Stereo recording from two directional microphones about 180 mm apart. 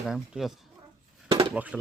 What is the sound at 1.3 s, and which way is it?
Dishes, 25° right (ahead or behind).